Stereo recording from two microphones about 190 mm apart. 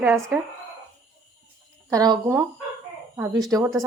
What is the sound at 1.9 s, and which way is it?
Speech, 20° right (ahead or behind).